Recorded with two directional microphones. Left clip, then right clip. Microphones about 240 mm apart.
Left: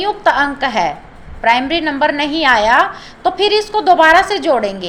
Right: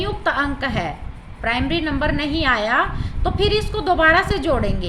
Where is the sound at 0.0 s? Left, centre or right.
Right.